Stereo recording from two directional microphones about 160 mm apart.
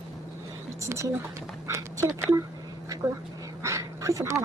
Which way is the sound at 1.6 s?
20° right (ahead or behind).